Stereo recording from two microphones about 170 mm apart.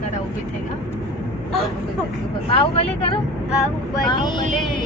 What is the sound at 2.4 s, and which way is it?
Speech, 30° left (ahead or behind).